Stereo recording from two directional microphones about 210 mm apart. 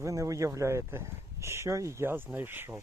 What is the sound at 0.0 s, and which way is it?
Speech, 15° right (ahead or behind).